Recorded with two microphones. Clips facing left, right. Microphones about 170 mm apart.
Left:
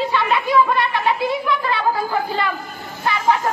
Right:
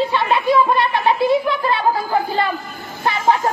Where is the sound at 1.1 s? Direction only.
30° right (ahead or behind).